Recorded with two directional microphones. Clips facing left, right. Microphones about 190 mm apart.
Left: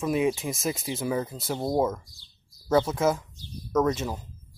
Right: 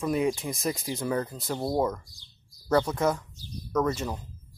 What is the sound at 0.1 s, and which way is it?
Speech, 20° left (ahead or behind).